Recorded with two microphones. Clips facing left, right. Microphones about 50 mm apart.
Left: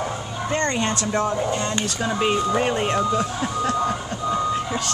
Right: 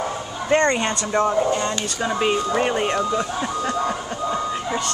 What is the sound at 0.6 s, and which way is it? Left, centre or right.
Speech, centre.